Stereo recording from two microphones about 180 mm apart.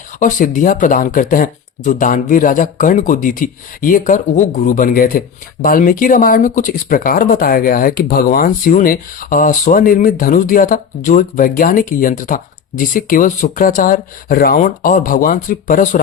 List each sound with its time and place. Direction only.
0.2 s speech: 45° left (ahead or behind)